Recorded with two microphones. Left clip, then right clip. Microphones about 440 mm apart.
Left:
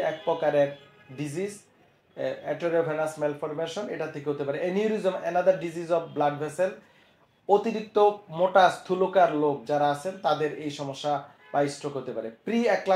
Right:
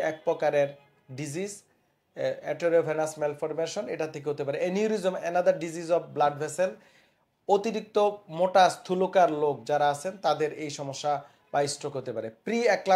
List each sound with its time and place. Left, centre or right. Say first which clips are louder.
0.0 s speech: left 1 dB; right